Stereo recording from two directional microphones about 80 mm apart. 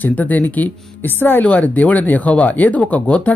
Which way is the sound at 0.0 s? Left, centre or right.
Left.